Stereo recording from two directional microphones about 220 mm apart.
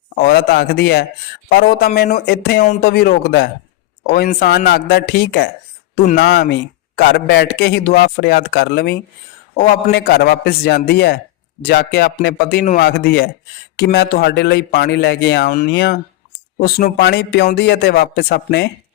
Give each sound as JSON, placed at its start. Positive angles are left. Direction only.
{"t": 0.2, "sound": "a man's voice", "side_deg": 45}